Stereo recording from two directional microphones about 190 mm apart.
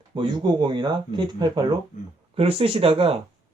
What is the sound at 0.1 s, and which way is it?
Speech, 25° right (ahead or behind).